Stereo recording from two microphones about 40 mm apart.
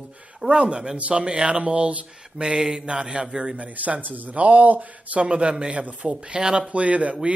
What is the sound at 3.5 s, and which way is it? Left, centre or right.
Speech, right.